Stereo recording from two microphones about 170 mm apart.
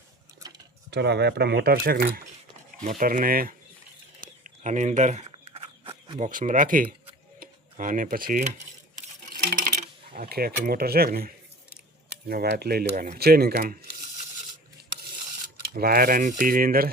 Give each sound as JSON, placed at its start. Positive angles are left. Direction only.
{"t": 0.9, "sound": "speech", "side_deg": -80}
{"t": 2.8, "sound": "speech", "side_deg": -50}
{"t": 4.2, "sound": "a sound", "side_deg": -50}
{"t": 5.5, "sound": "a sound", "side_deg": -30}
{"t": 6.1, "sound": "speech", "side_deg": -45}
{"t": 12.0, "sound": "speech", "side_deg": -75}
{"t": 15.7, "sound": "speech", "side_deg": -60}